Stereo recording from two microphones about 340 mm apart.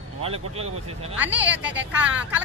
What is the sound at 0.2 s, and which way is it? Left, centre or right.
Speech, centre.